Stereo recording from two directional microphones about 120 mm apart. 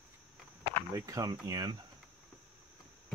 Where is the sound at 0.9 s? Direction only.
25° right (ahead or behind).